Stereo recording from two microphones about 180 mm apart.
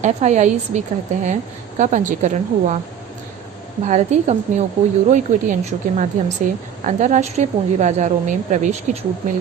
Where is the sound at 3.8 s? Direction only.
40° right (ahead or behind).